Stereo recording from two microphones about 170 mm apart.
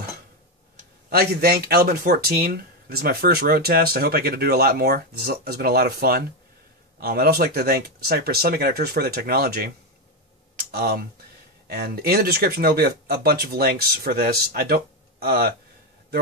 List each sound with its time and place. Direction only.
1.1 s speech: 65° right (ahead or behind)
10.5 s a sound: 65° right (ahead or behind)
11.6 s speech: 65° right (ahead or behind)